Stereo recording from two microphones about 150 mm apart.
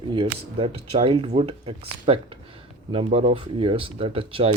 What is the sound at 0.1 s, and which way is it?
Speech, 35° right (ahead or behind).